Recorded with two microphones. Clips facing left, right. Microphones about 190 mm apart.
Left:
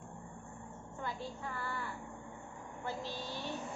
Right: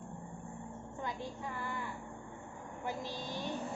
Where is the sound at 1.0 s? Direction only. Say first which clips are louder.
Even; 15° right (ahead or behind).